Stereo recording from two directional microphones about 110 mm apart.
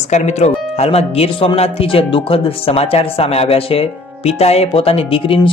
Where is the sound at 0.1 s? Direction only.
90° left.